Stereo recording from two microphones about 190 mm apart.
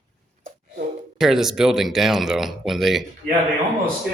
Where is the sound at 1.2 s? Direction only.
Centre (ahead or behind).